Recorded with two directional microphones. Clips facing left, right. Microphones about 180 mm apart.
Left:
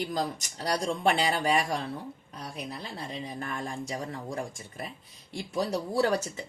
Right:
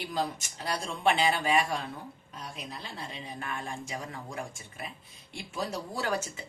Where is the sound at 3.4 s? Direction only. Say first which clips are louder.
Even; 40° left (ahead or behind).